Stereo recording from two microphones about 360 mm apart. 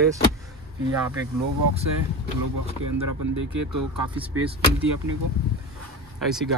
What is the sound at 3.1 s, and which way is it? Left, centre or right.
Speech, right.